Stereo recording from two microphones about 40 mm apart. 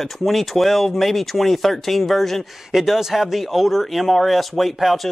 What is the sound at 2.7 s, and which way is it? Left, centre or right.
Speech, centre.